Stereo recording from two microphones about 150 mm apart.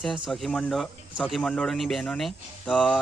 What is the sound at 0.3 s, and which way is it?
Speech, centre (ahead or behind).